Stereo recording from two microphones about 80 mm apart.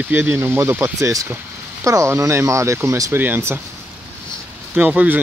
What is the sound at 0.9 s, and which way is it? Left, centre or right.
Speech, right.